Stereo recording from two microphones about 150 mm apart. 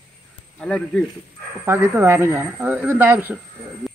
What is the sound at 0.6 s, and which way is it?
Speech, 5° left (ahead or behind).